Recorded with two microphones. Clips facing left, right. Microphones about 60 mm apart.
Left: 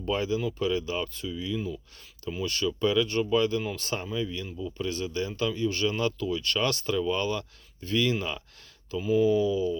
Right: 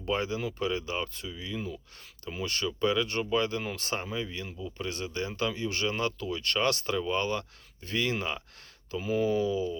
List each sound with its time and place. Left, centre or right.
0.1 s speech: right
2.8 s speech: right
5.5 s speech: right
9.0 s speech: right